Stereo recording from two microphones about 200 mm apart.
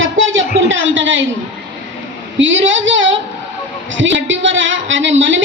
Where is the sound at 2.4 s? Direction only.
70° right (ahead or behind).